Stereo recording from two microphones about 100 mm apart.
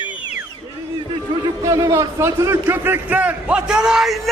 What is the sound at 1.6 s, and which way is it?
A man's voice, 35° right (ahead or behind).